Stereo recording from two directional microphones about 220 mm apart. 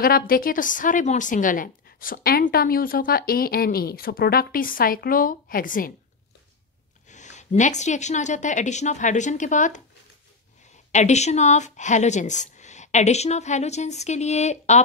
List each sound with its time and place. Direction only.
0.0 s a woman's voice: 40° left (ahead or behind)
7.1 s a woman's voice: 35° left (ahead or behind)
10.9 s a woman's voice: 30° left (ahead or behind)